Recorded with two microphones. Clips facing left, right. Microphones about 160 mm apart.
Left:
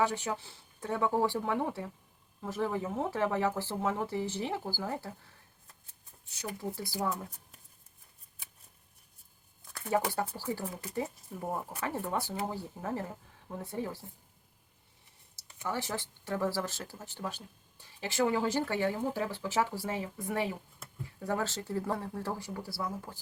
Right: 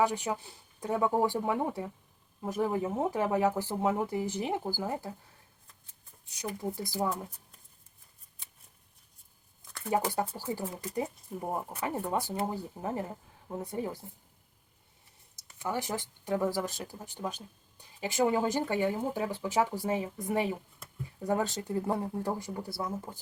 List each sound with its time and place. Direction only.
0.0 s speech: 15° right (ahead or behind)
6.4 s speech: 15° right (ahead or behind)
9.9 s speech: 15° right (ahead or behind)
15.6 s speech: 15° right (ahead or behind)